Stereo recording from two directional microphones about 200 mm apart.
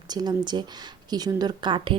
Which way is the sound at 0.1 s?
20° right (ahead or behind).